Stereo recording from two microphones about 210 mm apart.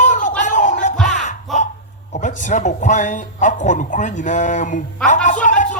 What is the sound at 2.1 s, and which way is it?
Speech, 35° left (ahead or behind).